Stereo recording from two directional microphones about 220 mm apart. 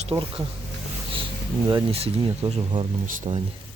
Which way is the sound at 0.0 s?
25° right (ahead or behind).